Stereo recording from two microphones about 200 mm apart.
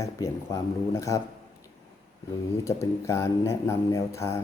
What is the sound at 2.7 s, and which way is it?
Speech, 15° left (ahead or behind).